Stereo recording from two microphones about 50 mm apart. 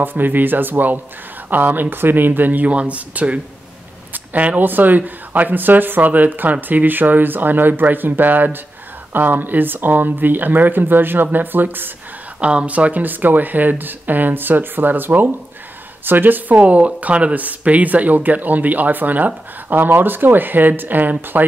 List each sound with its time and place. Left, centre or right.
0.0 s speech: right
12.4 s speech: right